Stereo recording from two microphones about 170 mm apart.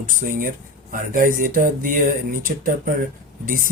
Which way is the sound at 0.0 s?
50° right (ahead or behind).